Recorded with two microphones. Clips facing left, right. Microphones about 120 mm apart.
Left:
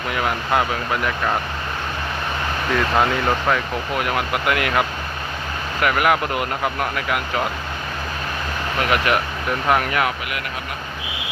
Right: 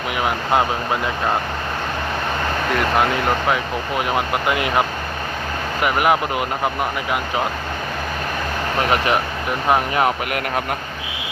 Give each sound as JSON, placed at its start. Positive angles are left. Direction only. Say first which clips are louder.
{"t": 0.2, "sound": "speech", "louder": "right 2 dB", "side_deg": -20}
{"t": 3.5, "sound": "speech", "louder": "right 1 dB", "side_deg": -25}
{"t": 8.8, "sound": "speech", "louder": "right 1 dB", "side_deg": -30}